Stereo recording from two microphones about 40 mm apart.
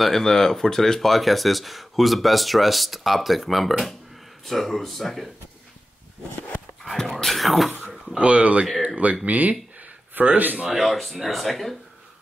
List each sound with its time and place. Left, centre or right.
0.0 s speech: centre
6.8 s a sound: centre
7.3 s speech: centre
7.8 s a sound: centre
8.1 s speech: right
10.7 s speech: centre